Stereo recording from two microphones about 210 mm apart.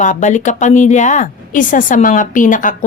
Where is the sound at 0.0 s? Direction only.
35° left (ahead or behind).